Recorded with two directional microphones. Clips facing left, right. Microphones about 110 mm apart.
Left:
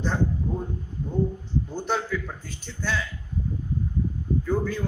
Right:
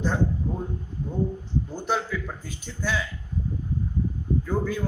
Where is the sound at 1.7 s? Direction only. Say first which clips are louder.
Even; 5° right (ahead or behind).